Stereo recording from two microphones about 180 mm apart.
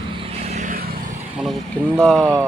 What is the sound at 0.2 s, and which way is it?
Vehicle, 35° right (ahead or behind).